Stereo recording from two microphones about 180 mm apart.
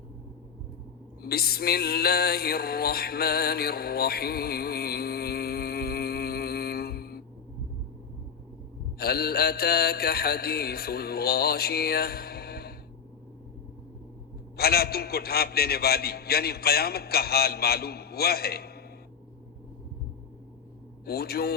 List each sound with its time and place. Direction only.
1.2 s music: 60° left (ahead or behind)
9.0 s a man's voice: 60° left (ahead or behind)
14.5 s a man's voice: 60° left (ahead or behind)
21.0 s a man's voice: 60° left (ahead or behind)